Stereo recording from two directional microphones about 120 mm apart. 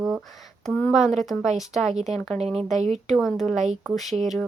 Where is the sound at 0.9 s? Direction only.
Centre (ahead or behind).